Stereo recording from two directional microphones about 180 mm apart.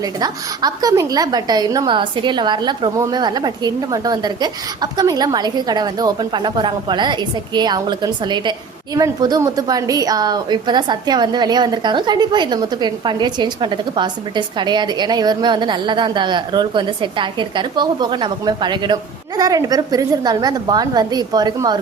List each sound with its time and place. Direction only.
0.0 s a woman's voice: 20° right (ahead or behind)